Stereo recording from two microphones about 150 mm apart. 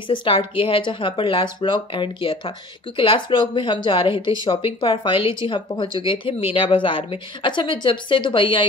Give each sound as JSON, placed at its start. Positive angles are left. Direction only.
{"t": 0.1, "sound": "speech", "side_deg": 35}